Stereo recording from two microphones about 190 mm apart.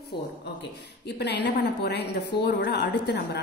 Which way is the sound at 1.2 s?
65° left (ahead or behind).